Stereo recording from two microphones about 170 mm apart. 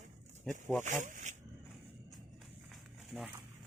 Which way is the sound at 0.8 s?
50° right (ahead or behind).